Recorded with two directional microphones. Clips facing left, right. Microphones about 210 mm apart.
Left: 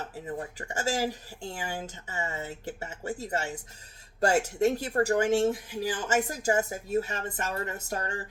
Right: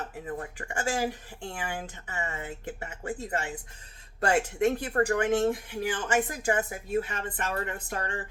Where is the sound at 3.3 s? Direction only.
40° left (ahead or behind).